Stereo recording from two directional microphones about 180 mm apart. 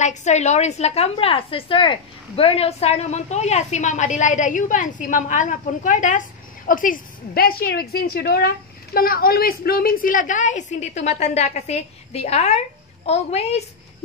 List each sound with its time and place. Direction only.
0.0 s a woman's voice: 40° left (ahead or behind)